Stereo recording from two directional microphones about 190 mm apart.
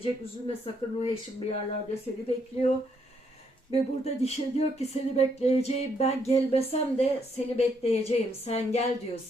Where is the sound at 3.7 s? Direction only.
35° left (ahead or behind).